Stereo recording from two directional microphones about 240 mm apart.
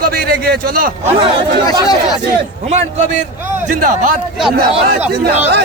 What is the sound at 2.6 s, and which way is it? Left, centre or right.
A man's voice, right.